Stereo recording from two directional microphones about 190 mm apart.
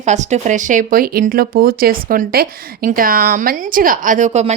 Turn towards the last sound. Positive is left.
turn(degrees=-40)  # may be behind; listen again after turning